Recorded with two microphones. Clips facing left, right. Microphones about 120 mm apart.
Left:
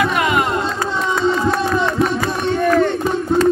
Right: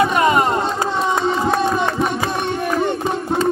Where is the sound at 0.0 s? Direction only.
35° right (ahead or behind).